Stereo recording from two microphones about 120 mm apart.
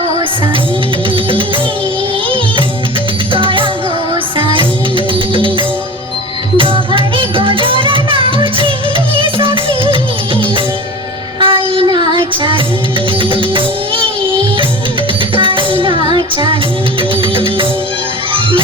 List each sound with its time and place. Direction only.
1.1 s music: 45° right (ahead or behind)
3.3 s music: 45° right (ahead or behind)
11.3 s child singing: 45° right (ahead or behind)
13.1 s music: 45° right (ahead or behind)
15.4 s music: 45° right (ahead or behind)